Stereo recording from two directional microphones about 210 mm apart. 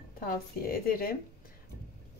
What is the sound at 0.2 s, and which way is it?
Speech, 45° left (ahead or behind).